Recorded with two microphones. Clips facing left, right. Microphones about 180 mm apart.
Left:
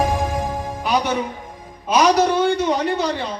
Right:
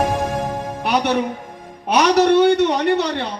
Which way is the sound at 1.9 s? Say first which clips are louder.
Right 2 dB; 70° right (ahead or behind).